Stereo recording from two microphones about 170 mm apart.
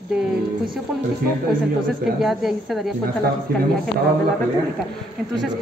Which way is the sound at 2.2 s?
Centre (ahead or behind).